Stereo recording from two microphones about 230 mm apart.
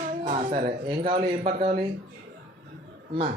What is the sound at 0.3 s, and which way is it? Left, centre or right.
Speech, right.